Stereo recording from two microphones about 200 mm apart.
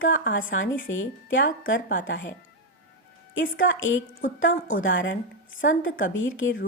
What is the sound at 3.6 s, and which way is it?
Speech, 75° left (ahead or behind).